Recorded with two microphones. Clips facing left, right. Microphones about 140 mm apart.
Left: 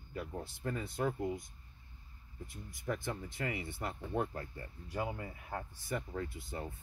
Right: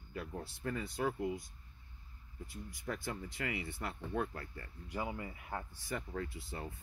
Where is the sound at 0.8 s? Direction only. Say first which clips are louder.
Left 1 dB; 50° left (ahead or behind).